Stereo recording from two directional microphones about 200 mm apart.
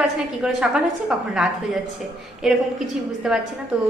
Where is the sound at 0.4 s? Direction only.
5° right (ahead or behind).